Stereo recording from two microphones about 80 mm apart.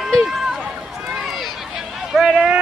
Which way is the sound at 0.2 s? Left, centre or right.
Centre.